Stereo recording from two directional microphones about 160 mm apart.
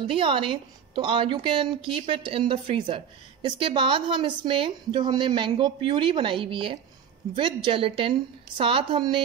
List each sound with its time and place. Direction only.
0.0 s a woman's voice: 30° right (ahead or behind)